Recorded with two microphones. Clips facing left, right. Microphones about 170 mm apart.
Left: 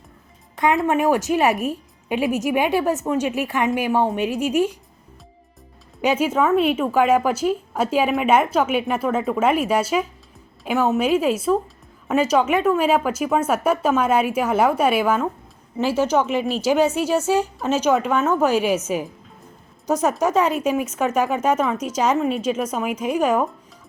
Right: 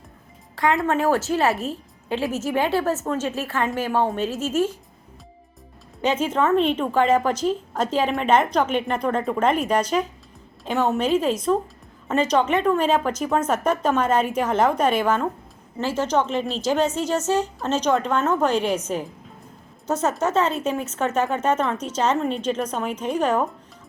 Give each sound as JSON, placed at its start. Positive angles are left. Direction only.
{"t": 0.5, "sound": "a woman's voice", "side_deg": 20}
{"t": 6.0, "sound": "a woman's voice", "side_deg": 10}